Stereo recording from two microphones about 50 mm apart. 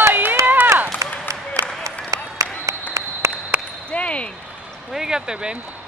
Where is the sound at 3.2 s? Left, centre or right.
Right.